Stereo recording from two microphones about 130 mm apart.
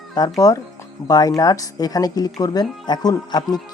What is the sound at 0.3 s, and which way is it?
Speech, 25° left (ahead or behind).